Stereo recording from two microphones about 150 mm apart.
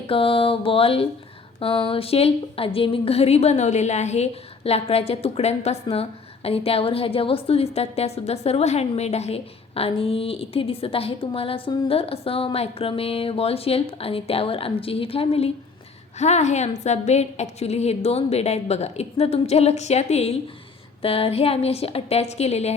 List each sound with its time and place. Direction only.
0.1 s a woman's voice: 35° left (ahead or behind)